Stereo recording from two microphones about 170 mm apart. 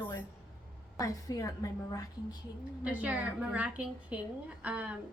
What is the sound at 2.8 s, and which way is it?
A woman's voice, 10° right (ahead or behind).